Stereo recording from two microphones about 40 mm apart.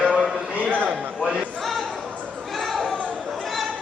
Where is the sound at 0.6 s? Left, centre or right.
Right.